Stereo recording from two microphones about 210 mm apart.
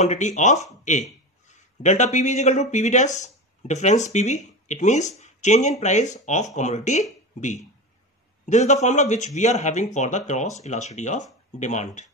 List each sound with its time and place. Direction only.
0.0 s a man's voice: 35° left (ahead or behind)